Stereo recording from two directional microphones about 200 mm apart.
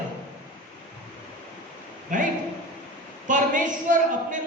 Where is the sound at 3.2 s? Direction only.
40° right (ahead or behind).